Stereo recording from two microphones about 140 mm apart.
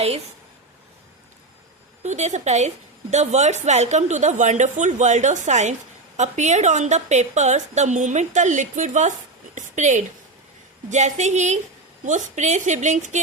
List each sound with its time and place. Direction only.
2.0 s a woman's voice: 55° right (ahead or behind)